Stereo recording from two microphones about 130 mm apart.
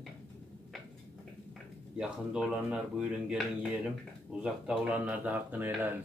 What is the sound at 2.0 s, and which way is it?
Speech, 5° right (ahead or behind).